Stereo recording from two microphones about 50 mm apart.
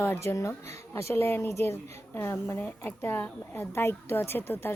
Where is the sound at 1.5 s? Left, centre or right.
Left.